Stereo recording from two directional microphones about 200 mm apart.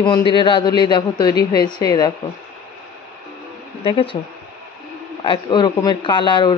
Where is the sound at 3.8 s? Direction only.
25° left (ahead or behind).